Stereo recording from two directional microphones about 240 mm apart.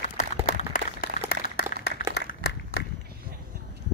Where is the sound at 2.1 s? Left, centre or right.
Left.